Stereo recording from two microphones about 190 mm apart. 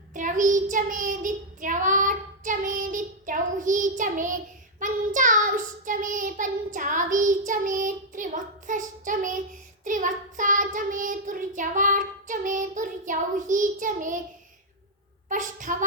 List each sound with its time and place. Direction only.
0.1 s child singing: 45° right (ahead or behind)
15.3 s child singing: 40° right (ahead or behind)